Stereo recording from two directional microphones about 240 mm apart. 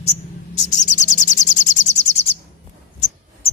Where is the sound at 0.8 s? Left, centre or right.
Left.